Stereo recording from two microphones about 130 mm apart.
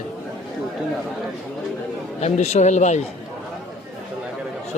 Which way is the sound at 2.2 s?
55° left (ahead or behind).